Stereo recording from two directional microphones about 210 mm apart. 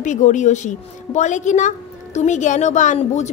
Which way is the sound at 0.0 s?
35° left (ahead or behind).